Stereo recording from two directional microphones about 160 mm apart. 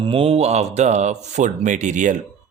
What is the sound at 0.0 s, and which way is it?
Speech, 35° right (ahead or behind).